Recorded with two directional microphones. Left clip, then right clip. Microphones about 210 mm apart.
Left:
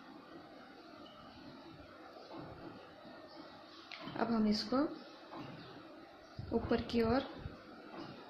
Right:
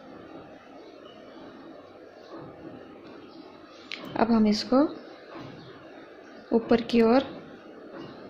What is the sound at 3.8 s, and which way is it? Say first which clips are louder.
Speech: right 12 dB; 40° right (ahead or behind).